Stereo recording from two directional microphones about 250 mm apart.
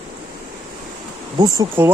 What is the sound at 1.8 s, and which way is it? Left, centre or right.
Speech, centre.